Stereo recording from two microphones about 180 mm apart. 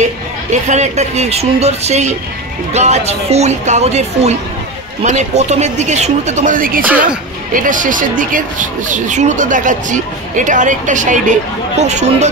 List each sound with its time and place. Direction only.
0.0 s speech: 40° right (ahead or behind)